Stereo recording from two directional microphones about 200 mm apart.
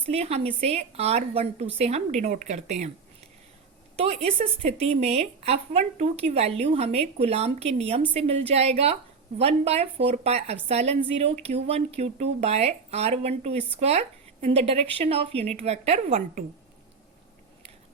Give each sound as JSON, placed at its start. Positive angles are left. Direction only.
{"t": 0.1, "sound": "speech", "side_deg": -30}
{"t": 3.9, "sound": "speech", "side_deg": -30}